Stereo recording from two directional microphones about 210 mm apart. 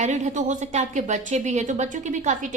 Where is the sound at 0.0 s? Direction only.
35° right (ahead or behind).